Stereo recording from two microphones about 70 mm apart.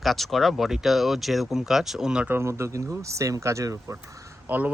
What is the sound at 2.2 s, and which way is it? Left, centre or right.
Speech, right.